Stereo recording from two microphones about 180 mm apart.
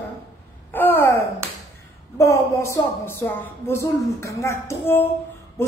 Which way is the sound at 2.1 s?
15° left (ahead or behind).